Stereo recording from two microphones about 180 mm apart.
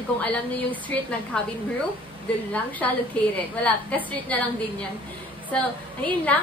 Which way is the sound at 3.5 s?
10° left (ahead or behind).